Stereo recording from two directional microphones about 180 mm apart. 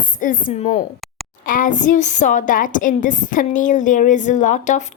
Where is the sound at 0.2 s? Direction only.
45° left (ahead or behind).